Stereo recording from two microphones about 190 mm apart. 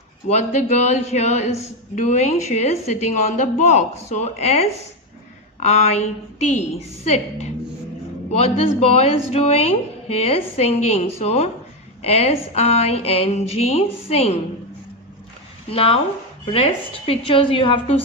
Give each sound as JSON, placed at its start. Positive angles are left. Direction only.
{"t": 0.3, "sound": "a woman's voice", "side_deg": 40}
{"t": 15.7, "sound": "a woman's voice", "side_deg": 30}
{"t": 17.1, "sound": "a woman's voice", "side_deg": 30}